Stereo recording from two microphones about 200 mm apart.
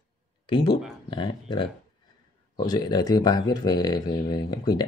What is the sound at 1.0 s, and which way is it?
Speech, 25° left (ahead or behind).